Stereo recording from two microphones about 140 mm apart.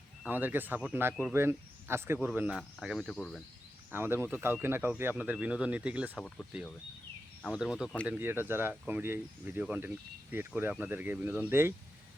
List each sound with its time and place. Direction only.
0.3 s speech: 15° right (ahead or behind)
2.5 s speech: centre (ahead or behind)
3.9 s speech: 15° right (ahead or behind)
6.1 s speech: 5° left (ahead or behind)
7.5 s speech: 5° right (ahead or behind)